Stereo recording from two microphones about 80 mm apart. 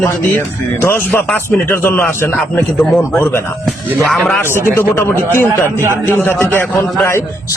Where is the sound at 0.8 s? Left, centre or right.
Left.